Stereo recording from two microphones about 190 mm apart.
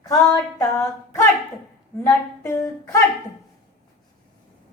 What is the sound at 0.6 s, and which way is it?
A woman's voice, 15° left (ahead or behind).